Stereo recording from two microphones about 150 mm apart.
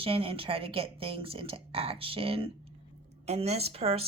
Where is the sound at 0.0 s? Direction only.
40° right (ahead or behind).